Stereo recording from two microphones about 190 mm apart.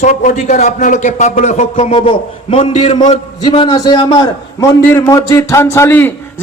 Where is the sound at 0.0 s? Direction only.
40° left (ahead or behind).